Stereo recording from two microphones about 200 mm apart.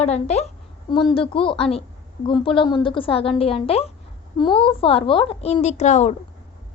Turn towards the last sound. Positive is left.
turn(degrees=35)  # may be behind; listen again after turning